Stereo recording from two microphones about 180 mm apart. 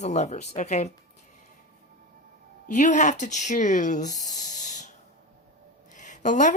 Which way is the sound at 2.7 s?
40° left (ahead or behind).